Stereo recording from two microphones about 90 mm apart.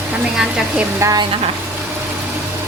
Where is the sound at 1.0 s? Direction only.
40° right (ahead or behind).